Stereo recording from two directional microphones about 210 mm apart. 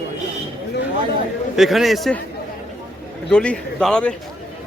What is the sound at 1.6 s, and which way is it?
Speech, centre (ahead or behind).